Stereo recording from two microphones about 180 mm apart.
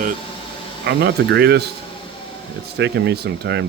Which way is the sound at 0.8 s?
65° right (ahead or behind).